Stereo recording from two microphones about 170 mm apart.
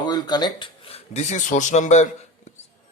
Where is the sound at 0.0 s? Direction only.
25° left (ahead or behind); by 2.0 s 45° left (ahead or behind).